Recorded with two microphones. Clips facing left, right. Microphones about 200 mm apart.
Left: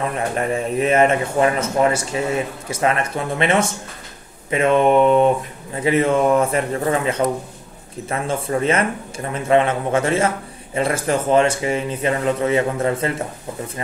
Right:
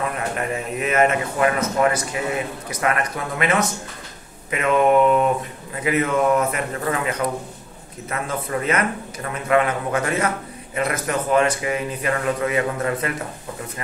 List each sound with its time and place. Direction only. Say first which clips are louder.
0.7 s a man's voice: left 3 dB; 30° left (ahead or behind)